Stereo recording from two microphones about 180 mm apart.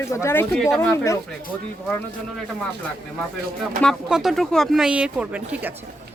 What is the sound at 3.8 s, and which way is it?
Speech, centre (ahead or behind).